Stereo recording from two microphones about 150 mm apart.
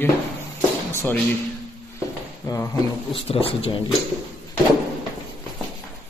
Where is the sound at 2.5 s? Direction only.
25° left (ahead or behind).